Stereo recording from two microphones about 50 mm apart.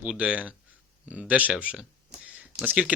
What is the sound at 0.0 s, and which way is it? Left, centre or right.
Speech, right.